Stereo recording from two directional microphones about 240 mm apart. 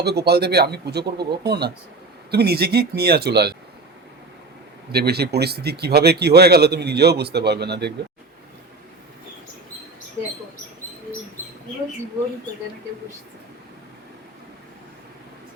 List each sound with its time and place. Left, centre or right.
0.0 s speech: right
4.9 s speech: right